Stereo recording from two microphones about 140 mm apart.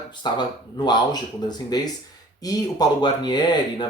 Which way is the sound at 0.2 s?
30° left (ahead or behind).